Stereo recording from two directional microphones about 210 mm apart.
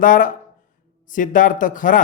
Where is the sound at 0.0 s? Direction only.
40° left (ahead or behind).